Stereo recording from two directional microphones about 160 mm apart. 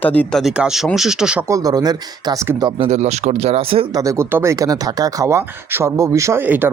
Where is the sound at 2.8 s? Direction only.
45° right (ahead or behind).